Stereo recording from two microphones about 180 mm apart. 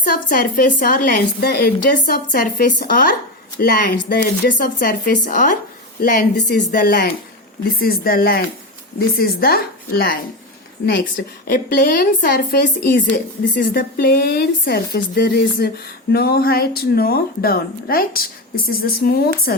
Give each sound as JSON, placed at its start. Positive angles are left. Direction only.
{"t": 0.1, "sound": "speech", "side_deg": 50}
{"t": 11.4, "sound": "speech", "side_deg": 50}